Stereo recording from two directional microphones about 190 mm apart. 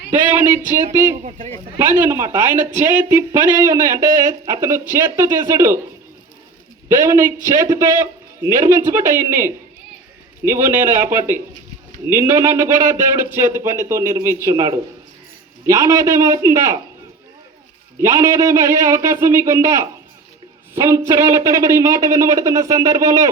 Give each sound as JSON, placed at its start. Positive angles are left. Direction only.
{"t": 0.1, "sound": "speech", "side_deg": -10}
{"t": 6.8, "sound": "speech", "side_deg": -15}
{"t": 18.0, "sound": "speech", "side_deg": -15}